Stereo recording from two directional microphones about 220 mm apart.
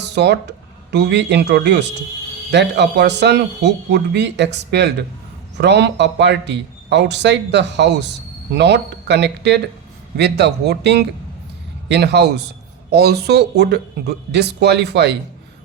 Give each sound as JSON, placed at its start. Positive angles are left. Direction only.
{"t": 0.0, "sound": "a man's voice", "side_deg": -50}